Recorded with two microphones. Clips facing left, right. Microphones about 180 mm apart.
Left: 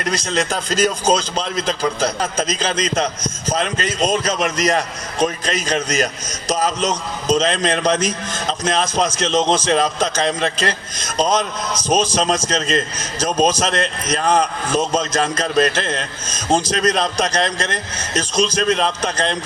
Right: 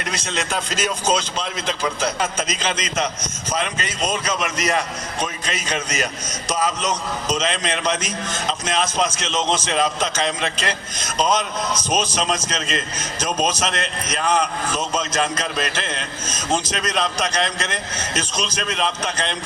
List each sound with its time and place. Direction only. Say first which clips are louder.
0.0 s a man's voice: left 6 dB; 35° left (ahead or behind)